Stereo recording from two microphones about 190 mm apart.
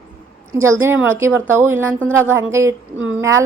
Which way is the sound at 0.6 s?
15° right (ahead or behind).